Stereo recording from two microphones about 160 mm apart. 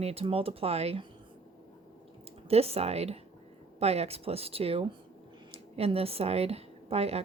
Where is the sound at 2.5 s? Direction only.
40° right (ahead or behind).